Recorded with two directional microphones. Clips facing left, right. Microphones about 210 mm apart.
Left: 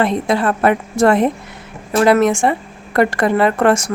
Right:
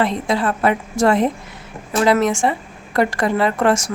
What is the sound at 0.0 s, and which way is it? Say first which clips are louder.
Speech: left 3 dB; 55° left (ahead or behind).